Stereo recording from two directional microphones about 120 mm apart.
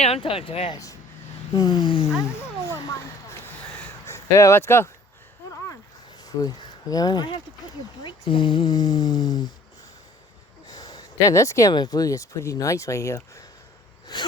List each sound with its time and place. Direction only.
0.0 s speech: 55° left (ahead or behind)
1.5 s speech: 30° left (ahead or behind)
4.0 s speech: 25° left (ahead or behind)
6.2 s speech: 30° left (ahead or behind)
10.7 s a sound: 35° left (ahead or behind)
11.7 s speech: 35° left (ahead or behind)
14.1 s speech: 35° left (ahead or behind)